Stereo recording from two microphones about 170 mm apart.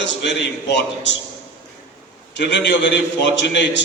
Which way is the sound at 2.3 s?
90° left.